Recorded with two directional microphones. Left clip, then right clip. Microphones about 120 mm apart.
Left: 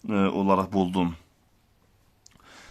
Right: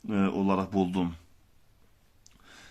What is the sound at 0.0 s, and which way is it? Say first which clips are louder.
Speech: left 4 dB; 40° left (ahead or behind).